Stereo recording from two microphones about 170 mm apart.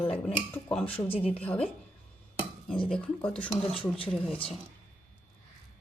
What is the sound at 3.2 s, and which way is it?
Speech, 5° left (ahead or behind).